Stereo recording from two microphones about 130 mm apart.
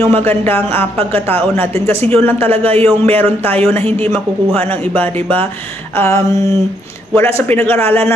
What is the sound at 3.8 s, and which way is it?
Speech, 50° right (ahead or behind).